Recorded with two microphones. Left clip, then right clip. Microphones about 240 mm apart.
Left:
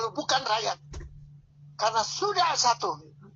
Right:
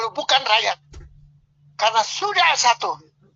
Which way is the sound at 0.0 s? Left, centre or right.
Right.